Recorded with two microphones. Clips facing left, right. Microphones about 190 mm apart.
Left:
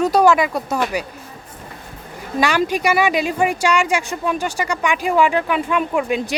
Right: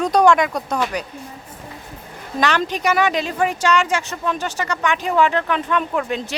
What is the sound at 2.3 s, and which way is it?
Speech, 10° left (ahead or behind).